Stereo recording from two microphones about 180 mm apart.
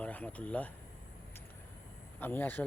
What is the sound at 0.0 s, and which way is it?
Speech, 10° left (ahead or behind).